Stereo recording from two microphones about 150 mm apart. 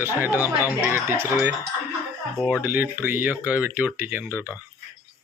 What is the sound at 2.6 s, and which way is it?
Speech, 10° right (ahead or behind).